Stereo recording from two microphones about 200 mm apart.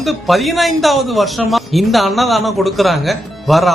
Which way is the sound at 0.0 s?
Centre (ahead or behind).